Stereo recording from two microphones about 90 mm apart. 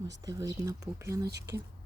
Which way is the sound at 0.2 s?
40° right (ahead or behind).